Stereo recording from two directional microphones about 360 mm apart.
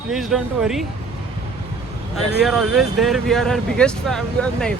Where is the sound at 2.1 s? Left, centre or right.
Centre.